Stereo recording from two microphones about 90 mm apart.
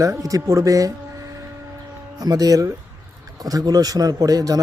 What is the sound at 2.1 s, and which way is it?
A man's voice, 45° right (ahead or behind).